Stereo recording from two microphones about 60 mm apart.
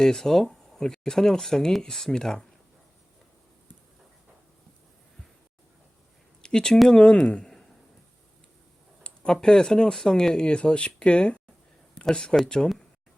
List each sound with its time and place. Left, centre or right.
0.0 s speech: centre
6.4 s a sound: centre
6.9 s speech: centre
9.0 s speech: centre